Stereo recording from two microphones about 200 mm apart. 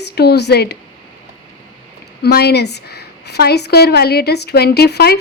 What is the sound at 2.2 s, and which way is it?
A woman's voice, 55° left (ahead or behind).